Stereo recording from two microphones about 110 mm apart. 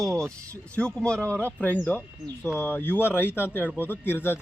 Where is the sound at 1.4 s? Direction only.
20° right (ahead or behind).